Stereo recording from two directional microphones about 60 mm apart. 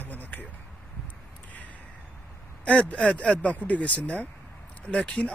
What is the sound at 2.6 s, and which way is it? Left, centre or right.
Speech, left.